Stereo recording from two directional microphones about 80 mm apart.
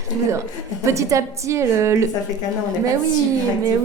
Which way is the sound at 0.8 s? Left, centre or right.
Right.